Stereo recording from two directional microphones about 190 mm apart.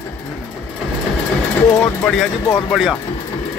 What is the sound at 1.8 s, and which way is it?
Speech, 5° left (ahead or behind).